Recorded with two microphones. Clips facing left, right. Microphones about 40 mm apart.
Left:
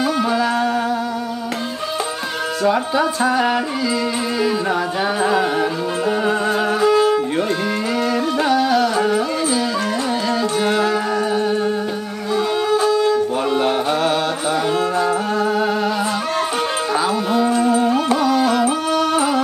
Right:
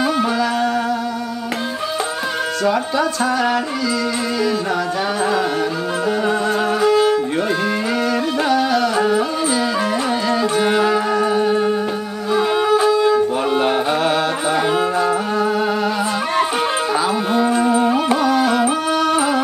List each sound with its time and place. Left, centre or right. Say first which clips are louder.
0.0 s music: even; centre
2.7 s music: left 1 dB; centre
5.2 s music: left 2 dB; centre
8.4 s carnatic music: left 1 dB; centre
10.5 s music: right 2 dB; centre
17.3 s music: even; centre